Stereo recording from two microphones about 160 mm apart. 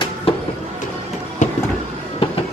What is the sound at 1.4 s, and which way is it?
Vehicle, 50° left (ahead or behind).